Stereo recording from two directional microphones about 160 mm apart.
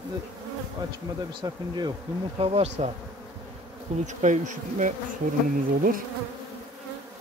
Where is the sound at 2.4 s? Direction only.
40° right (ahead or behind).